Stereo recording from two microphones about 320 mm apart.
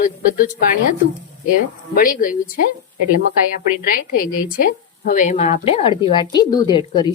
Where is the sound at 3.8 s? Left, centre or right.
Left.